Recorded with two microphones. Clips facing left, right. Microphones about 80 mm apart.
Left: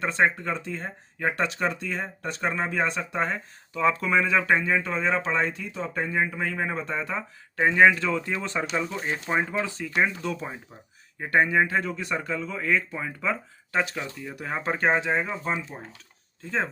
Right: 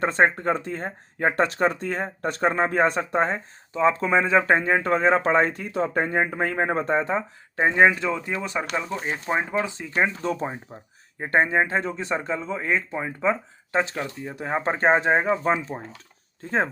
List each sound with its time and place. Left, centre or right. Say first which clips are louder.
0.0 s speech: right 3 dB; right